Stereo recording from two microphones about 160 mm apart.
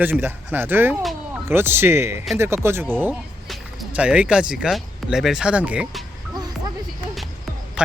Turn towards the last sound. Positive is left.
turn(degrees=-5)  # may be behind; listen again after turning